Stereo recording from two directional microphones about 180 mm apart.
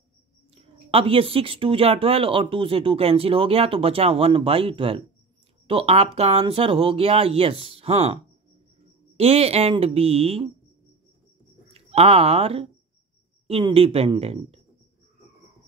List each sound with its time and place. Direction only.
0.6 s speech: 30° right (ahead or behind)
11.7 s speech: 35° right (ahead or behind)